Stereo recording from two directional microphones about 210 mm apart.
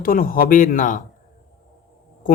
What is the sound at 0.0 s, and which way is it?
Speech, 45° left (ahead or behind).